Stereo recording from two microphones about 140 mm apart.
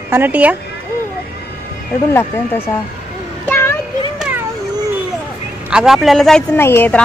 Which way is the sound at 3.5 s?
15° left (ahead or behind).